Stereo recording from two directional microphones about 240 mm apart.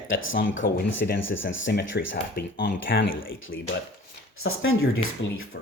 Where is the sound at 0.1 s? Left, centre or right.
Left.